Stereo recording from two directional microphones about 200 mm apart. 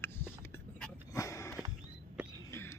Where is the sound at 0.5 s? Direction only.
15° left (ahead or behind).